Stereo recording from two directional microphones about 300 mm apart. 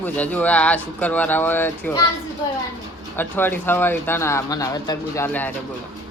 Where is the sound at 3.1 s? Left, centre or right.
Centre.